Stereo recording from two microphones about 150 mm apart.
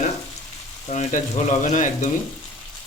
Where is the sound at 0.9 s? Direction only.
50° left (ahead or behind).